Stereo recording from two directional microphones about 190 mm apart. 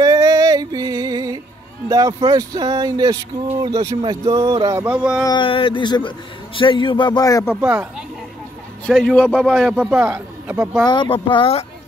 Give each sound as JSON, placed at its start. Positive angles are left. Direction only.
{"t": 0.0, "sound": "music", "side_deg": -20}
{"t": 1.9, "sound": "speech", "side_deg": -20}
{"t": 5.2, "sound": "a man's voice", "side_deg": 25}
{"t": 7.6, "sound": "a man's voice", "side_deg": -10}
{"t": 8.8, "sound": "a man's voice", "side_deg": 5}
{"t": 10.9, "sound": "a man's voice", "side_deg": 25}